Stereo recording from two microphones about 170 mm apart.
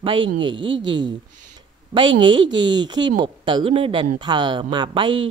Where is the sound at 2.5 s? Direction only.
25° right (ahead or behind).